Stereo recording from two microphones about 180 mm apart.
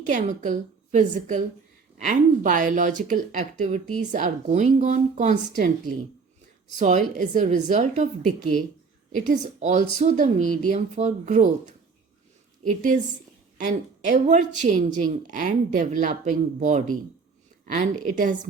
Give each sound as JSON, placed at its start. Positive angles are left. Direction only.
{"t": 0.0, "sound": "speech", "side_deg": -45}